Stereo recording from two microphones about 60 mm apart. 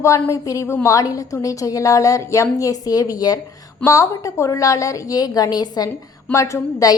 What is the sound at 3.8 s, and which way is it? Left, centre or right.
A woman's voice, left.